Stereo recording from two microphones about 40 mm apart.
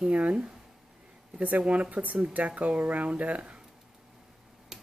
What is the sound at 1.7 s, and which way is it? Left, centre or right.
Speech, right.